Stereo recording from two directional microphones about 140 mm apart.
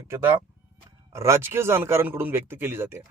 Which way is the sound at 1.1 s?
20° right (ahead or behind).